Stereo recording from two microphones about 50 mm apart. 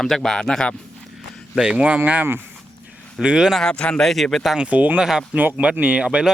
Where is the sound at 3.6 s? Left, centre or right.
Centre.